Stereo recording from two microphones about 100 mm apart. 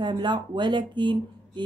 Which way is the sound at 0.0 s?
50° right (ahead or behind).